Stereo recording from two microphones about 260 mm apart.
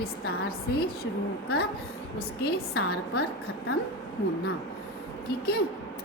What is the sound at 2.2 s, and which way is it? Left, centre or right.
Speech, left.